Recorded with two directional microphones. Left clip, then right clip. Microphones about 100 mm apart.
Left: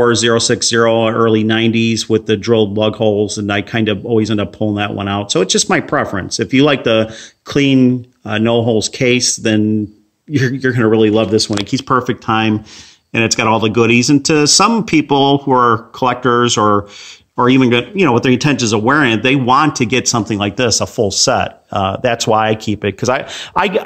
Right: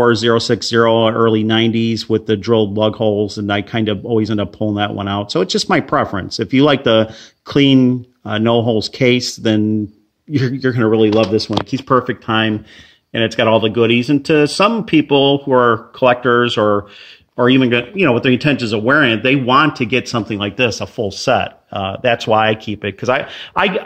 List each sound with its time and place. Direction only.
0.0 s speech: 25° right (ahead or behind)
11.9 s speech: 15° left (ahead or behind)
12.3 s speech: 30° left (ahead or behind)
13.1 s speech: 50° left (ahead or behind)
17.5 s speech: 30° left (ahead or behind)